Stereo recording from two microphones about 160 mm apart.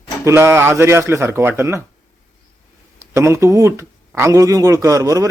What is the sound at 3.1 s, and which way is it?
A man's voice, 15° right (ahead or behind).